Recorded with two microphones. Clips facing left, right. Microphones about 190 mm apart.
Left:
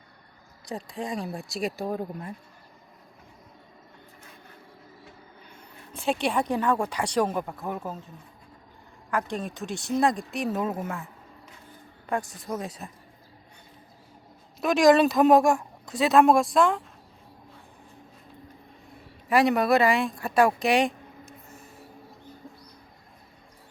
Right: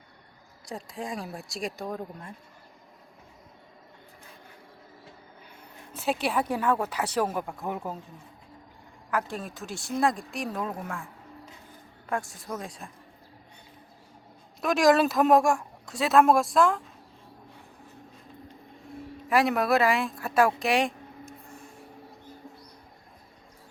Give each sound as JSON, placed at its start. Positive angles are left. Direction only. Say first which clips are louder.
{"t": 0.6, "sound": "speech", "louder": "left 3 dB", "side_deg": 0}
{"t": 5.9, "sound": "speech", "louder": "left 2 dB", "side_deg": -5}
{"t": 9.0, "sound": "speech", "louder": "left 2 dB", "side_deg": -5}
{"t": 14.6, "sound": "speech", "louder": "left 3 dB", "side_deg": 0}
{"t": 19.3, "sound": "speech", "louder": "left 2 dB", "side_deg": 0}